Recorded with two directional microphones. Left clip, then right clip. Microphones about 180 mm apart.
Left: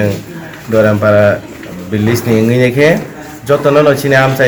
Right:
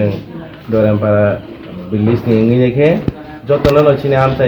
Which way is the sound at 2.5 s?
10° left (ahead or behind).